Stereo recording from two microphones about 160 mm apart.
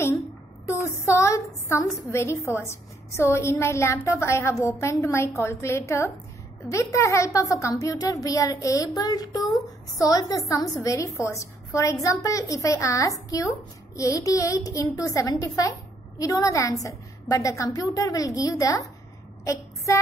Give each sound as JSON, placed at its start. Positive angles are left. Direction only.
{"t": 0.7, "sound": "a woman's voice", "side_deg": 15}